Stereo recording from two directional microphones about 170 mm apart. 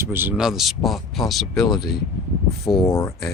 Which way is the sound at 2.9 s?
15° left (ahead or behind).